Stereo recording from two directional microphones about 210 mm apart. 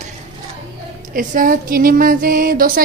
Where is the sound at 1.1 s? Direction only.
40° right (ahead or behind).